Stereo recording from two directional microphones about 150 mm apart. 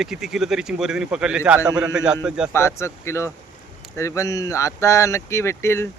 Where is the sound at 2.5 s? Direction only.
15° left (ahead or behind).